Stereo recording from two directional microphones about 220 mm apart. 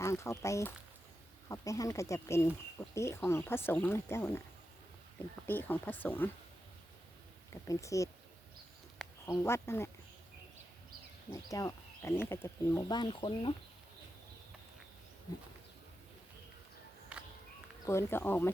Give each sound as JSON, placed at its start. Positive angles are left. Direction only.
{"t": 0.0, "sound": "speech", "side_deg": 15}
{"t": 5.5, "sound": "speech", "side_deg": 10}
{"t": 7.5, "sound": "speech", "side_deg": 15}
{"t": 9.2, "sound": "speech", "side_deg": 10}
{"t": 11.3, "sound": "speech", "side_deg": 15}
{"t": 17.1, "sound": "music", "side_deg": -5}
{"t": 17.8, "sound": "speech", "side_deg": 10}